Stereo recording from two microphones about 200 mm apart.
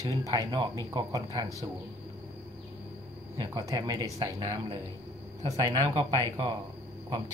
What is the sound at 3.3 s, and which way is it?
Speech, 20° right (ahead or behind).